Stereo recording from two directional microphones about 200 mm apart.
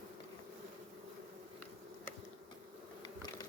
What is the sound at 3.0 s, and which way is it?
Bee, 20° left (ahead or behind).